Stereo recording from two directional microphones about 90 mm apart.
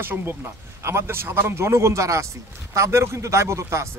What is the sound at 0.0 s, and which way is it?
Speech, 25° right (ahead or behind).